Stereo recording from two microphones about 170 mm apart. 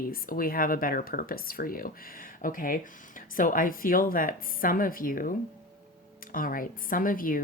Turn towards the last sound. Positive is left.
turn(degrees=55)  # may be behind; listen again after turning